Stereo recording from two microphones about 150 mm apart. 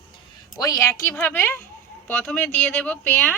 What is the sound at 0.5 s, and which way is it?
Speech, 25° left (ahead or behind).